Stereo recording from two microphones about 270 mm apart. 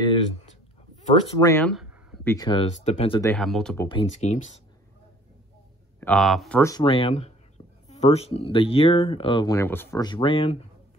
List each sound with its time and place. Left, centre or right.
1.4 s speech: centre
2.2 s speech: centre
3.3 s speech: centre
4.0 s speech: left
5.9 s speech: centre
6.6 s speech: centre